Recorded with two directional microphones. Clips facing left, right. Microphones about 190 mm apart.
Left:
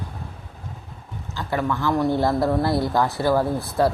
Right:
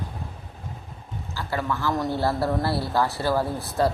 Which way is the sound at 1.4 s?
20° left (ahead or behind).